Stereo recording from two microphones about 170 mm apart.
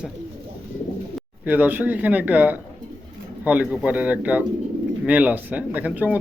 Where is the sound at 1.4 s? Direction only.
10° right (ahead or behind).